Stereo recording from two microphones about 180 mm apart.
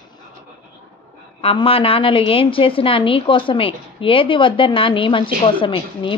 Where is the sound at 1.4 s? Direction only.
30° left (ahead or behind).